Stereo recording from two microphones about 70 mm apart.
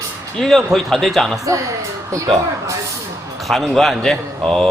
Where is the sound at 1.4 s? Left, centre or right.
Right.